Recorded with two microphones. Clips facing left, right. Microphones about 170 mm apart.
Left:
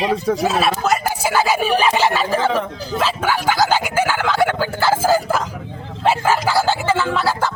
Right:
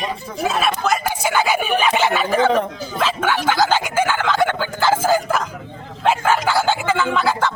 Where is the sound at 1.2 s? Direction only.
5° left (ahead or behind).